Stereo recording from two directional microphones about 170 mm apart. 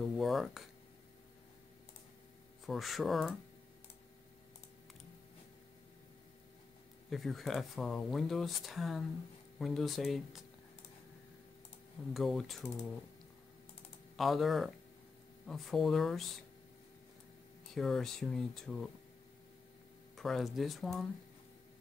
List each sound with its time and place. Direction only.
0.2 s speech: centre (ahead or behind)
2.6 s speech: centre (ahead or behind)
7.1 s speech: centre (ahead or behind)
12.1 s speech: centre (ahead or behind)
14.1 s speech: centre (ahead or behind)
17.7 s speech: centre (ahead or behind)
20.2 s speech: centre (ahead or behind)